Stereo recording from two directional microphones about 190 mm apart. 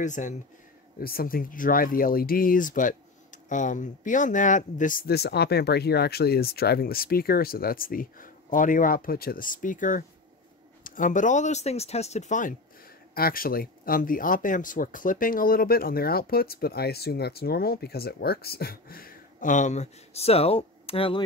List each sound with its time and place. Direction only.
0.0 s speech: 40° left (ahead or behind)
0.9 s speech: 50° left (ahead or behind); by 21.2 s 30° left (ahead or behind)